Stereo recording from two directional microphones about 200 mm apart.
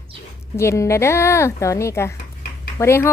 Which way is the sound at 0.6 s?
15° left (ahead or behind).